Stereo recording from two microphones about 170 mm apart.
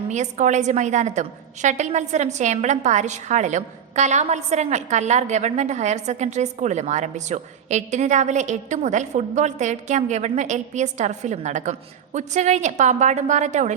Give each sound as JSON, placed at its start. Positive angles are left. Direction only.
{"t": 0.1, "sound": "a woman's voice", "side_deg": -45}